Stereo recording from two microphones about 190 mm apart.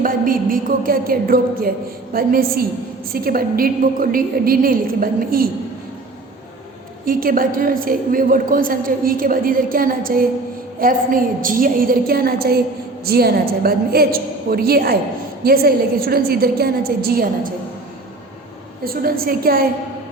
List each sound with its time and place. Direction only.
0.0 s a woman's voice: 45° right (ahead or behind)
7.0 s a woman's voice: 50° right (ahead or behind)
19.2 s a woman's voice: 50° right (ahead or behind)